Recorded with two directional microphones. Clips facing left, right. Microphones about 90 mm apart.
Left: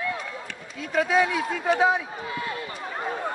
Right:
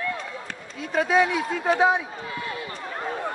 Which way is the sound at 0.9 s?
30° right (ahead or behind).